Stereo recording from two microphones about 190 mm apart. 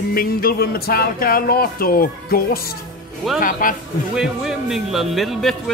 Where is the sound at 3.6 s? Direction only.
45° left (ahead or behind).